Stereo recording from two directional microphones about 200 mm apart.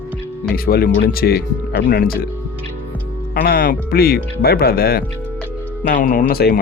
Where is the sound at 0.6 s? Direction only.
50° left (ahead or behind).